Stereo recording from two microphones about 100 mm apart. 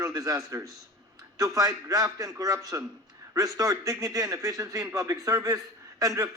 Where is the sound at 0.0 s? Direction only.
35° right (ahead or behind).